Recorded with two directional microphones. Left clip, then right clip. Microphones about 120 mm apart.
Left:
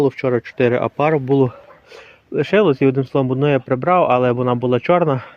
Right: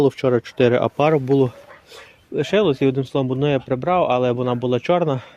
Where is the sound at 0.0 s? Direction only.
45° right (ahead or behind).